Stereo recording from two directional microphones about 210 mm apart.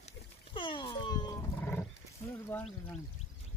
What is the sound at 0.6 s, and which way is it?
Roaring cats, 25° left (ahead or behind).